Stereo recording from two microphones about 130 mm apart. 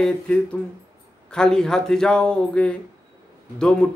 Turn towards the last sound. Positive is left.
turn(degrees=10)  # may be behind; listen again after turning